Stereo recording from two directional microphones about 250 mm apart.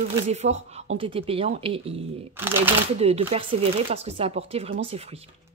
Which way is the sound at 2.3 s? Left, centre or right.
Centre.